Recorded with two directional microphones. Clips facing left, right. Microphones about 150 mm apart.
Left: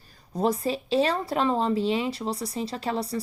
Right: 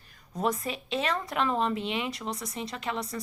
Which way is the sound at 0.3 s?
30° left (ahead or behind).